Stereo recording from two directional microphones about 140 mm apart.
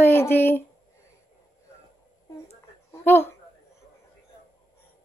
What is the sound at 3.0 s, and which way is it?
Speech, 15° left (ahead or behind).